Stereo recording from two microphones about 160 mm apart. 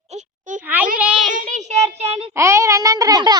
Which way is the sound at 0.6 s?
10° right (ahead or behind).